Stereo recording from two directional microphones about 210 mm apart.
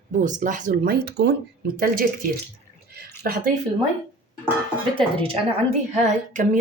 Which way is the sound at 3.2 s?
45° right (ahead or behind).